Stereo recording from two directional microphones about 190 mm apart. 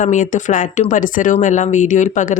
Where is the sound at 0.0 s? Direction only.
40° left (ahead or behind).